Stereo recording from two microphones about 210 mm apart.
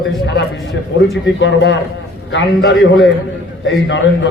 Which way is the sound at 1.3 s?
60° left (ahead or behind).